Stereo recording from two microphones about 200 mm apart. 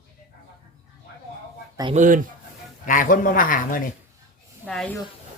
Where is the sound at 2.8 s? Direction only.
40° left (ahead or behind).